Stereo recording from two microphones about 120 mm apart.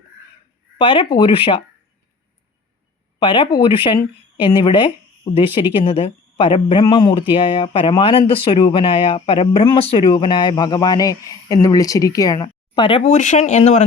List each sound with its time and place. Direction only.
0.8 s speech: 45° left (ahead or behind)
3.2 s speech: 45° left (ahead or behind)
6.8 s speech: 35° left (ahead or behind)
13.1 s speech: 90° left